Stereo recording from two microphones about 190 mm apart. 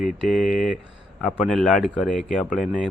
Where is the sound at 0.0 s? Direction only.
45° left (ahead or behind).